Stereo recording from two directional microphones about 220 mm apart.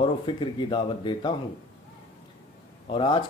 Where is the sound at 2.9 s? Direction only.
25° left (ahead or behind).